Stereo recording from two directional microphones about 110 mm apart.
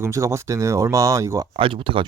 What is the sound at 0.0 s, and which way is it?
Speech, 25° right (ahead or behind).